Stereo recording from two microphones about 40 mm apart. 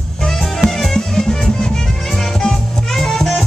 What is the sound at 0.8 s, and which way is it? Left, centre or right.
Music, centre.